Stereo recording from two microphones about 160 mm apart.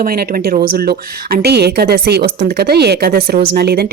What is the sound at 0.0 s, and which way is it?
A woman's voice, 70° right (ahead or behind).